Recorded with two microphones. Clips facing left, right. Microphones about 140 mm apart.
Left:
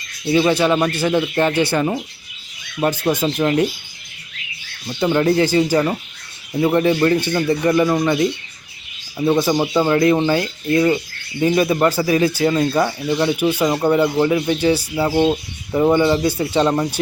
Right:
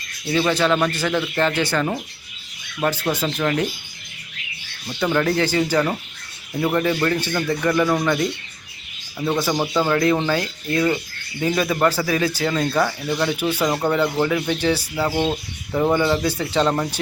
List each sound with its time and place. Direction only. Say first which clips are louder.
0.3 s speech: left 4 dB; 15° left (ahead or behind)
4.9 s speech: left 4 dB; 20° left (ahead or behind)
7.9 s speech: left 3 dB; 10° left (ahead or behind)
9.9 s speech: left 4 dB; 25° left (ahead or behind)